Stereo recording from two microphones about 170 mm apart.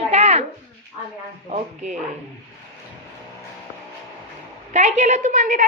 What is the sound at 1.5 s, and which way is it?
Speech, 45° right (ahead or behind).